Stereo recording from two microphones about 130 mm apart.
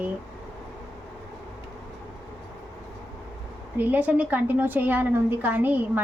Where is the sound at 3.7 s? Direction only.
15° right (ahead or behind).